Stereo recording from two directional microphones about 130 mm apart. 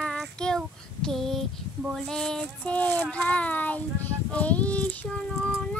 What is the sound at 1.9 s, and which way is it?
Speech, 5° left (ahead or behind).